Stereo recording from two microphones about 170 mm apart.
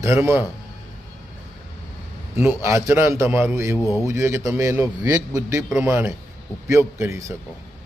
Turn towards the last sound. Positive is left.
turn(degrees=-15)  # may be behind; listen again after turning